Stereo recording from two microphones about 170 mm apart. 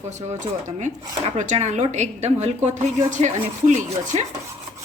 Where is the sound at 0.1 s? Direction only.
45° right (ahead or behind).